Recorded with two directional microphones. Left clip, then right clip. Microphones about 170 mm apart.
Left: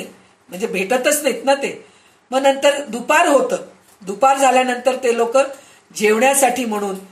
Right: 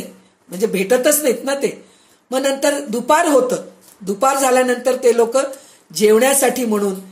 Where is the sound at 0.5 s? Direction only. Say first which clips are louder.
Right 3 dB; 60° right (ahead or behind).